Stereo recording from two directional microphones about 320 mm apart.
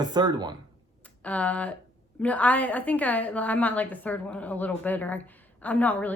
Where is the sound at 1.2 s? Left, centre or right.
Centre.